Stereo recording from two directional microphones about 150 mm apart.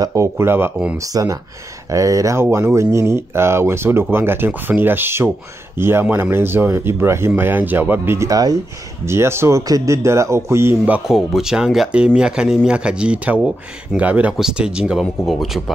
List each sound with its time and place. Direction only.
0.0 s speech: 20° right (ahead or behind)
0.9 s speech: 20° right (ahead or behind)
11.1 s speech: centre (ahead or behind)